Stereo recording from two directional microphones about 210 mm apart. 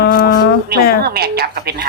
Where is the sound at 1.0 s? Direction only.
50° right (ahead or behind).